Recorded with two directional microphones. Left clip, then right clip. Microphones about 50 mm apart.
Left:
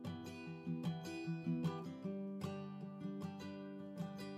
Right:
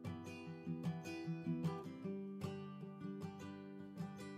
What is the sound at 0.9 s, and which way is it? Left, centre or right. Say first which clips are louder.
Music: even; centre.